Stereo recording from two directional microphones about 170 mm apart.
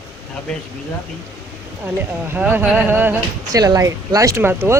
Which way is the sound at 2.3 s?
10° right (ahead or behind).